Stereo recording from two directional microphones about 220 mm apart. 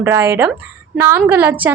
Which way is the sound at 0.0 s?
10° right (ahead or behind).